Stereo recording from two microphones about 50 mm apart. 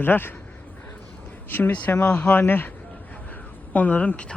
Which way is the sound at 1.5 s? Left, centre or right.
Left.